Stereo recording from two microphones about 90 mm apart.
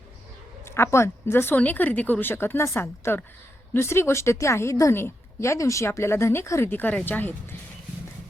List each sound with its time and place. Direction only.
0.6 s a woman's voice: 30° left (ahead or behind)
6.7 s a woman's voice: 20° left (ahead or behind)